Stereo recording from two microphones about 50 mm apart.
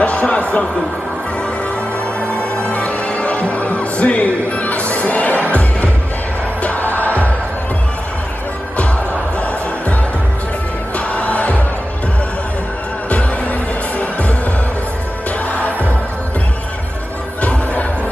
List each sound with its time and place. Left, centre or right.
0.0 s a sound: left
2.1 s music: left
11.0 s music: left
13.1 s music: left
17.4 s music: left